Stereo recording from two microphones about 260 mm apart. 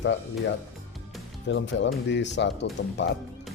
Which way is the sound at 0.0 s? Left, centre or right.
Left.